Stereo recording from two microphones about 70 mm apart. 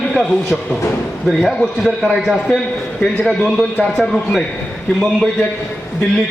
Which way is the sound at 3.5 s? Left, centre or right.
Centre.